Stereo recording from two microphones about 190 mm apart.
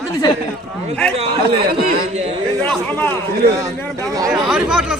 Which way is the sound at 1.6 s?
50° right (ahead or behind).